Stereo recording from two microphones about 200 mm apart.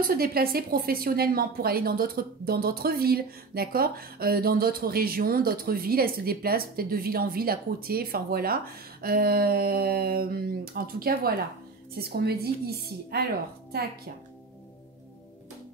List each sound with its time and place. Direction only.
0.0 s a woman's voice: 50° right (ahead or behind)